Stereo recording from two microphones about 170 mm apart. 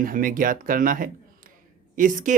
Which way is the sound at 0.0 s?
55° right (ahead or behind).